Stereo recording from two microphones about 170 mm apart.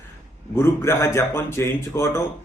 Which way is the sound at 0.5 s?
15° left (ahead or behind).